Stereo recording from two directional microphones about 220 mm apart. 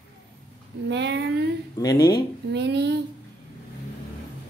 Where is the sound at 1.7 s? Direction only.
15° left (ahead or behind).